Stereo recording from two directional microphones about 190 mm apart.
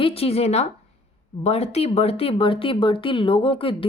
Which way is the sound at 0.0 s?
30° left (ahead or behind).